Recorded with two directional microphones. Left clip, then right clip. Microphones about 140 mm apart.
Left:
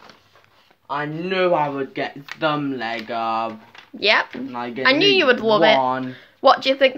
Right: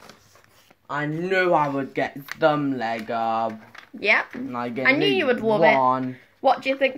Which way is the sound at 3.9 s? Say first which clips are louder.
Left 3 dB; 15° left (ahead or behind).